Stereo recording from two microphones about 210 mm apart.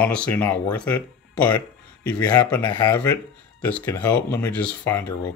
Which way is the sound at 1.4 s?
20° left (ahead or behind).